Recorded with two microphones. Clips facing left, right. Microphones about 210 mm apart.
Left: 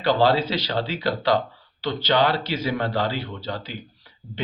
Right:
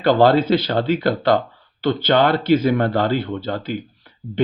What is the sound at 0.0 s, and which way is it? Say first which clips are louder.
Speech: right 5 dB; 50° right (ahead or behind).